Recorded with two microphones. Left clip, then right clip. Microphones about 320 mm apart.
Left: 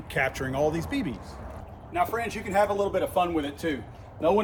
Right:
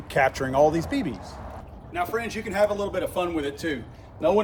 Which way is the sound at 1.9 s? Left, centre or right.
Centre.